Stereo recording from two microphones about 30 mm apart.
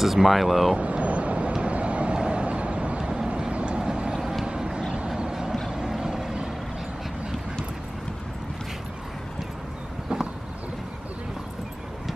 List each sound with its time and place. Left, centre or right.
0.0 s speech: centre
0.7 s vehicle: right
3.0 s vehicle: right